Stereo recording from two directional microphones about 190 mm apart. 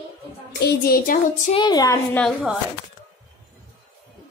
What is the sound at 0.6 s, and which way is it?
Child singing, 55° left (ahead or behind).